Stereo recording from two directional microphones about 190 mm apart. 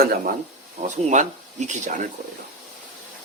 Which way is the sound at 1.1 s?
40° right (ahead or behind).